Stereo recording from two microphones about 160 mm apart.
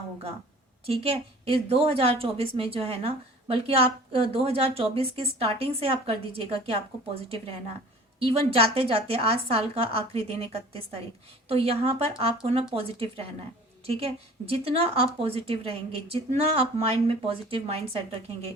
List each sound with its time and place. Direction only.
0.9 s speech: 35° right (ahead or behind)